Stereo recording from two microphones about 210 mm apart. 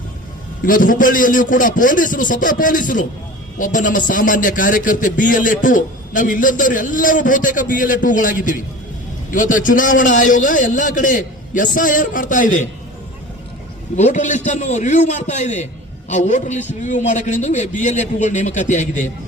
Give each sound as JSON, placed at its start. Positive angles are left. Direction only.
{"t": 0.6, "sound": "a man's voice", "side_deg": 40}
{"t": 13.9, "sound": "a man's voice", "side_deg": 35}